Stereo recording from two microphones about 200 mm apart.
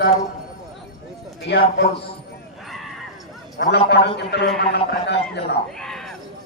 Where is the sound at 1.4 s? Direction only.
55° left (ahead or behind).